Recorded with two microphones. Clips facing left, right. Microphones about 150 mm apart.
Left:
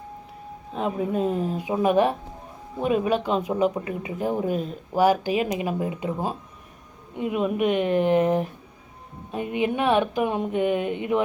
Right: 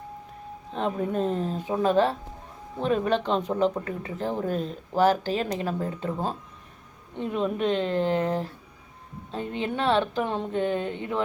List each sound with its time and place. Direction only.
0.7 s speech: 5° left (ahead or behind)